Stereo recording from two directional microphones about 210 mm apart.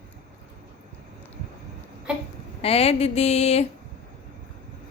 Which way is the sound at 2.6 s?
30° left (ahead or behind).